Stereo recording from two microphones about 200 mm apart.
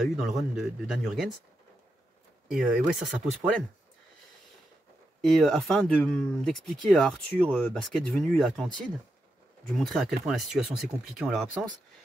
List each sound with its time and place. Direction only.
0.0 s speech: centre (ahead or behind)
2.5 s speech: 5° right (ahead or behind)
5.2 s speech: centre (ahead or behind)
9.8 s speech: centre (ahead or behind)